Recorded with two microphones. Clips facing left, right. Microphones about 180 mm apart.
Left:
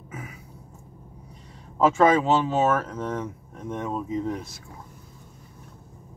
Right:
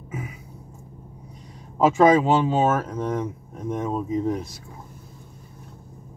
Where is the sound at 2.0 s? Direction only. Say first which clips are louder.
Right 4 dB; 15° right (ahead or behind).